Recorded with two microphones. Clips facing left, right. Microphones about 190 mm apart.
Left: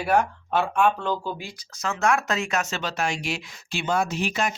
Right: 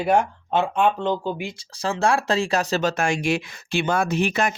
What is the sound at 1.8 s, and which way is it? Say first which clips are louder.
Speech: right 2 dB; 30° right (ahead or behind).